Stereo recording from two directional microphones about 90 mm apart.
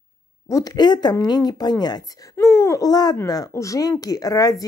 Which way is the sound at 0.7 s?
55° left (ahead or behind).